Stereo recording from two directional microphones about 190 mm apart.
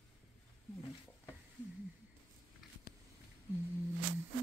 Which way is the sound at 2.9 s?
55° left (ahead or behind).